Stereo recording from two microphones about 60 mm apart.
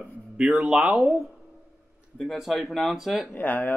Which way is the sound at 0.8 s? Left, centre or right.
Centre.